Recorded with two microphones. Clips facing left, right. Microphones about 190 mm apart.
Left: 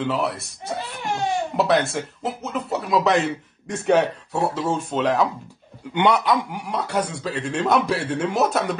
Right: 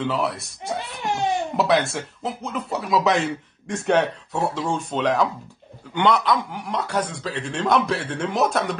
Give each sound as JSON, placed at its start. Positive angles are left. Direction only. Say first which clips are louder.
{"t": 0.0, "sound": "speech", "louder": "even", "side_deg": 0}
{"t": 1.0, "sound": "crying", "louder": "right 1 dB", "side_deg": -20}
{"t": 1.6, "sound": "speech", "louder": "left 1 dB", "side_deg": 0}